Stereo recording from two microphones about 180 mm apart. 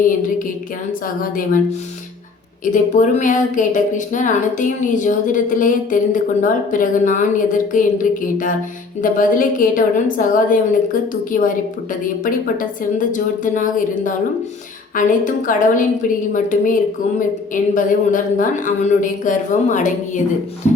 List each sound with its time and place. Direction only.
1.0 s a woman's voice: 50° left (ahead or behind)
2.6 s a woman's voice: 45° left (ahead or behind)